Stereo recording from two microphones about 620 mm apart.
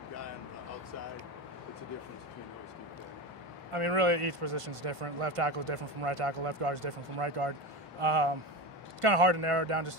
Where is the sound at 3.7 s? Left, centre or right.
Right.